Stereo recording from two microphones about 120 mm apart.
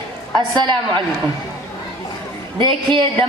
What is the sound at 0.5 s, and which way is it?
Speech, 40° right (ahead or behind).